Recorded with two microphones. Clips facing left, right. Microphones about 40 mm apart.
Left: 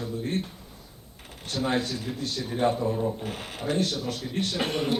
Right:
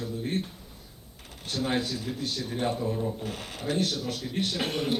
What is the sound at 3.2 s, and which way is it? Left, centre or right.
Speech, left.